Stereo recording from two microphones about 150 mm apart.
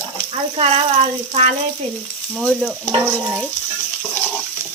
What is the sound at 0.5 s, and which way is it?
Speech, 45° right (ahead or behind).